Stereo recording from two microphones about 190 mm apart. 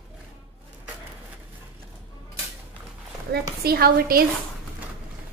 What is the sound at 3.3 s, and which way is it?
Speech, 55° right (ahead or behind).